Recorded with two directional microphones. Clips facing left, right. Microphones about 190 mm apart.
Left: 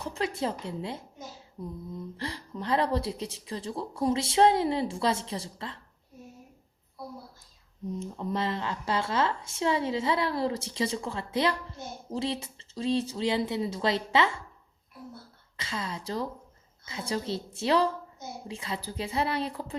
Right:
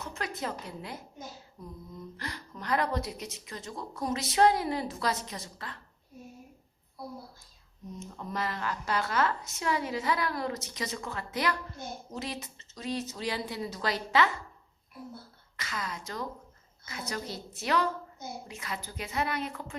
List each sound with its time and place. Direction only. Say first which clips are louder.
0.0 s a woman's voice: left 5 dB; 30° left (ahead or behind)
7.9 s a woman's voice: left 4 dB; 30° left (ahead or behind)
15.5 s a woman's voice: left 3 dB; 30° left (ahead or behind)